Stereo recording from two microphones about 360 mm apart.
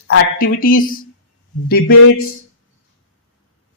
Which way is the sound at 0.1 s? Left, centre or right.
Left.